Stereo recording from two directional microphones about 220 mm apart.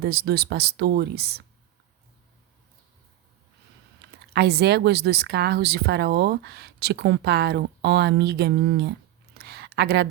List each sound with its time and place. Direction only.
0.0 s speech: 45° right (ahead or behind)
4.4 s speech: 50° right (ahead or behind)
9.3 s a sound: 45° right (ahead or behind)